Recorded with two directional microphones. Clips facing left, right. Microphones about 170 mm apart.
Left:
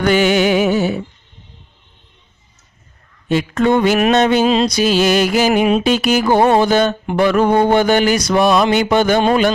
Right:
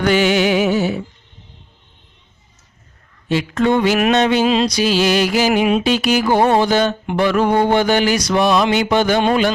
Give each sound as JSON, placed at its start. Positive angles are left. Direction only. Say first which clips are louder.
{"t": 0.0, "sound": "music", "louder": "left 1 dB", "side_deg": 45}
{"t": 3.2, "sound": "mantra", "louder": "left 2 dB", "side_deg": 45}
{"t": 4.0, "sound": "a sound", "louder": "left 2 dB", "side_deg": 45}
{"t": 4.7, "sound": "mantra", "louder": "left 2 dB", "side_deg": 50}